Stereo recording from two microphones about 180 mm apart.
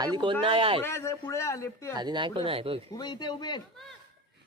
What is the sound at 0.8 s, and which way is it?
A man's voice, 15° left (ahead or behind).